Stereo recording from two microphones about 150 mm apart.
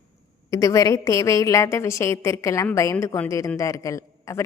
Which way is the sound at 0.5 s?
25° left (ahead or behind).